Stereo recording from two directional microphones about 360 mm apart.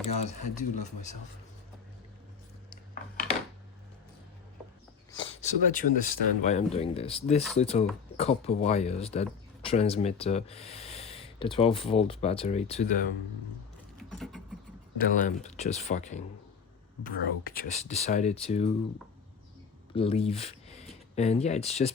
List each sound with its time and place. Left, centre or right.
0.1 s speech: centre
5.1 s speech: centre
14.1 s a sound: centre
14.9 s speech: centre
19.9 s speech: centre